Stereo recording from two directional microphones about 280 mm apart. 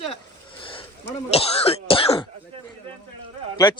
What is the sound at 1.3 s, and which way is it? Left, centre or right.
A man's voice, left.